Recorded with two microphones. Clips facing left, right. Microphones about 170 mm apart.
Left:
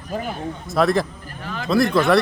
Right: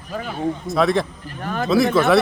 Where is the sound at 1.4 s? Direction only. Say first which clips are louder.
Right 5 dB; 50° right (ahead or behind).